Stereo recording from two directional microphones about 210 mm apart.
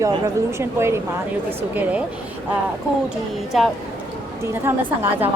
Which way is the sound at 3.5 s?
Centre (ahead or behind).